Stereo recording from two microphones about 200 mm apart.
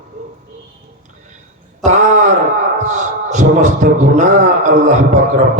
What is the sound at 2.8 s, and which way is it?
A man's voice, 35° right (ahead or behind).